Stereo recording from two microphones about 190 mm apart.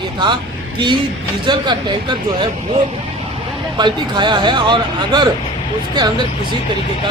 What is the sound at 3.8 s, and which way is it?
Speech, 25° right (ahead or behind).